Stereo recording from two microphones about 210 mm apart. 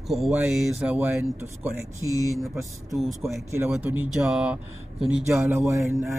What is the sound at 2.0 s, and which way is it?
Speech, 15° left (ahead or behind).